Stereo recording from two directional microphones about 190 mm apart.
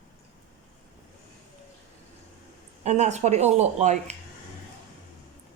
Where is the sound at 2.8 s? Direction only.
35° right (ahead or behind).